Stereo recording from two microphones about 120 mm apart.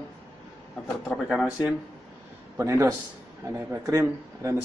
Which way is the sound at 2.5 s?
25° right (ahead or behind).